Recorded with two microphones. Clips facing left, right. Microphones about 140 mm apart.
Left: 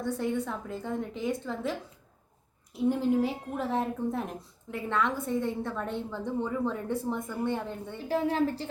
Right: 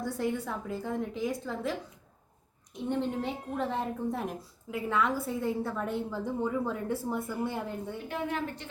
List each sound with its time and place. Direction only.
0.1 s a woman's voice: centre (ahead or behind)
2.7 s a woman's voice: 5° left (ahead or behind)
8.0 s a woman's voice: 35° left (ahead or behind)